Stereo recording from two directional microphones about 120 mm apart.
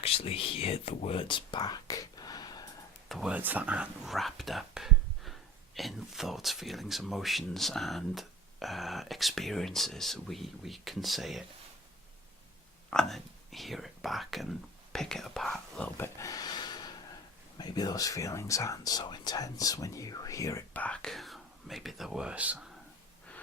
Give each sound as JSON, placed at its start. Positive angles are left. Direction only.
{"t": 0.0, "sound": "speech", "side_deg": 55}
{"t": 3.1, "sound": "speech", "side_deg": -5}
{"t": 12.9, "sound": "speech", "side_deg": 5}
{"t": 16.0, "sound": "a sound", "side_deg": 25}
{"t": 17.6, "sound": "speech", "side_deg": 35}
{"t": 20.7, "sound": "speech", "side_deg": 10}